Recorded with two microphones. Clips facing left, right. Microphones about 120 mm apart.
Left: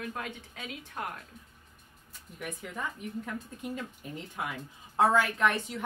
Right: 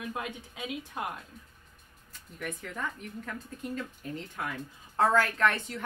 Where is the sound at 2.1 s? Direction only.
10° left (ahead or behind).